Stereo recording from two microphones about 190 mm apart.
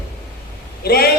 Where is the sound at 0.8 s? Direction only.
55° left (ahead or behind).